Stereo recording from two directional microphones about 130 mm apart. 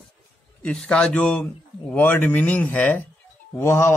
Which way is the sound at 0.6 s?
10° left (ahead or behind).